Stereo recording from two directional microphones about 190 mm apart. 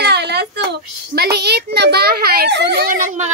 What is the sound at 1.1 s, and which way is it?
A child's voice, 60° right (ahead or behind).